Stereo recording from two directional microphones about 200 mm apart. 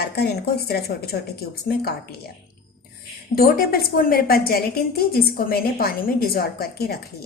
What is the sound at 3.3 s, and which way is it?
A woman's voice, 50° left (ahead or behind).